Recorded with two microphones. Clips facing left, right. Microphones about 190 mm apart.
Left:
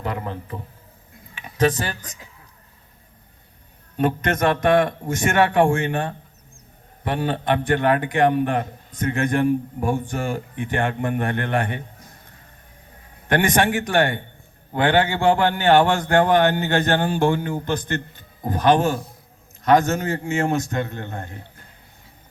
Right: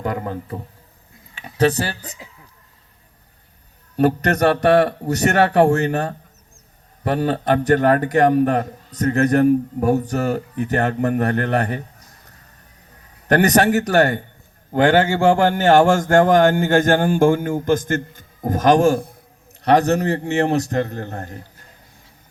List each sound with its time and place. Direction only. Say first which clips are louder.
0.0 s a man's voice: right 4 dB; 45° right (ahead or behind)
3.9 s a man's voice: right 4 dB; 40° right (ahead or behind)
13.2 s a man's voice: right 4 dB; 40° right (ahead or behind)
19.6 s a man's voice: right 2 dB; 40° right (ahead or behind)